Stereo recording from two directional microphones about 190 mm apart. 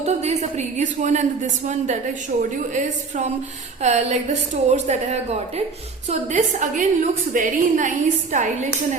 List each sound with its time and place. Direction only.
0.0 s a woman's voice: 35° right (ahead or behind)